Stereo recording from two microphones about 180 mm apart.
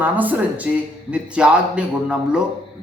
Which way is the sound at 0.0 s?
10° right (ahead or behind).